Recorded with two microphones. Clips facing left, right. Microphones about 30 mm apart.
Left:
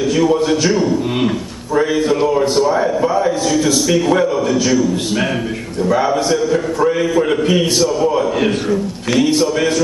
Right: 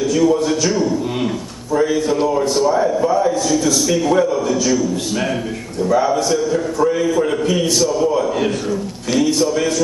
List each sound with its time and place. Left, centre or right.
0.1 s a man's voice: left